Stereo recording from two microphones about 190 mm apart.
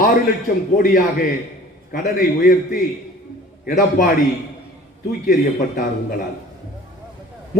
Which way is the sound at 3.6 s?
50° left (ahead or behind).